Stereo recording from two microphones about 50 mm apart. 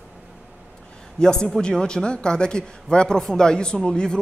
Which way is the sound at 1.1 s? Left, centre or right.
Centre.